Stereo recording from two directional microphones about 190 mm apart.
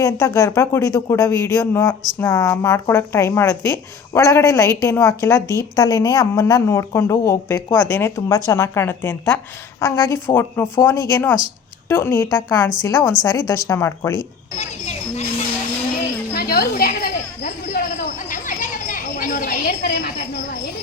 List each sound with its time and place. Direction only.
0.0 s a woman's voice: 15° left (ahead or behind)
14.6 s speech: 35° left (ahead or behind)
16.3 s a sound: 50° left (ahead or behind)